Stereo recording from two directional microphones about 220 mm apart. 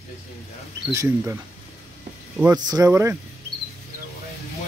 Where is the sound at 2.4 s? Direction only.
15° right (ahead or behind).